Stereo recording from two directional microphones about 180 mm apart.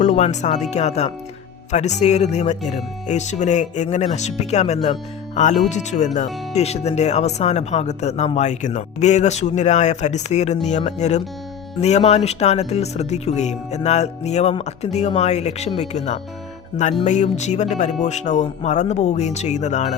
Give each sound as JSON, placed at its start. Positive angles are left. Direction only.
{"t": 0.0, "sound": "speech", "side_deg": 40}